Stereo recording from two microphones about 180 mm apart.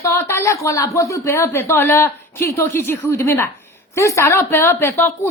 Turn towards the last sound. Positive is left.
turn(degrees=10)  # may be behind; listen again after turning